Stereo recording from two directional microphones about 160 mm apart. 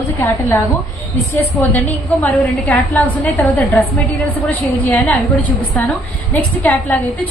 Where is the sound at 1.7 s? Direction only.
10° left (ahead or behind).